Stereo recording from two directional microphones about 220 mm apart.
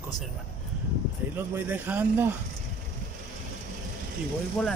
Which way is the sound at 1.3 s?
10° right (ahead or behind).